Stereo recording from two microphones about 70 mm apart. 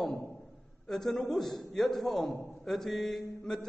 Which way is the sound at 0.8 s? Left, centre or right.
Centre.